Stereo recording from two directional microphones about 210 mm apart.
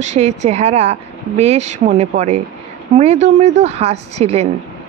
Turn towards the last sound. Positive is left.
turn(degrees=-30)  # may be behind; listen again after turning